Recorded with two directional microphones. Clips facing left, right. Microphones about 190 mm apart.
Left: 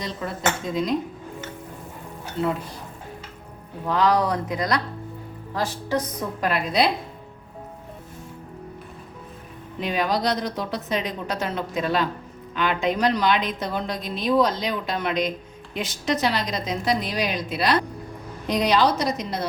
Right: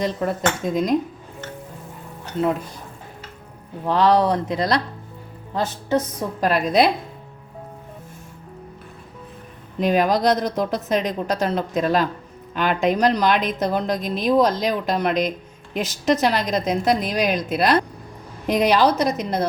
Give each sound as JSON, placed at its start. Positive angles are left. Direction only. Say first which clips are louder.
{"t": 0.0, "sound": "speech", "louder": "right 5 dB", "side_deg": -50}
{"t": 3.8, "sound": "speech", "louder": "right 4 dB", "side_deg": -30}
{"t": 6.4, "sound": "speech", "louder": "right 5 dB", "side_deg": -40}
{"t": 9.8, "sound": "speech", "louder": "right 6 dB", "side_deg": -45}